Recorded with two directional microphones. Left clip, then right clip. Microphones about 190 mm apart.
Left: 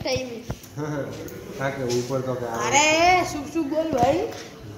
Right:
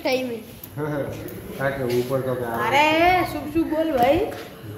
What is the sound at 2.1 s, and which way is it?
Speech, 15° left (ahead or behind).